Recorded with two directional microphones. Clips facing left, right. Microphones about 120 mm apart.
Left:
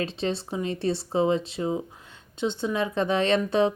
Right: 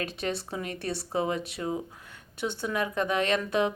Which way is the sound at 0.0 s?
25° left (ahead or behind).